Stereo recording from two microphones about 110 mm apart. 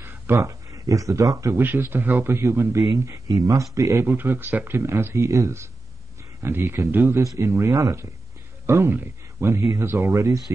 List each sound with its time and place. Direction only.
0.0 s speech: 25° right (ahead or behind)
1.6 s speech: 20° right (ahead or behind)
3.3 s speech: 35° right (ahead or behind)
4.0 s speech: 20° right (ahead or behind)